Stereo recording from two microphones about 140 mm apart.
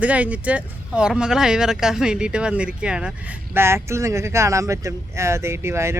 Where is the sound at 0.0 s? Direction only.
10° right (ahead or behind).